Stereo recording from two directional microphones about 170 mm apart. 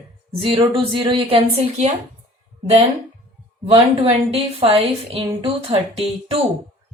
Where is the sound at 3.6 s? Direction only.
35° right (ahead or behind).